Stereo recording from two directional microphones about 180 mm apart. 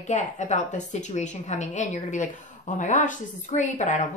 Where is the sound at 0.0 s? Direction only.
40° left (ahead or behind).